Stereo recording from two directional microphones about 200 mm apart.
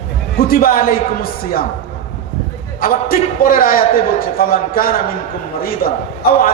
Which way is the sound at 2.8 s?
45° left (ahead or behind).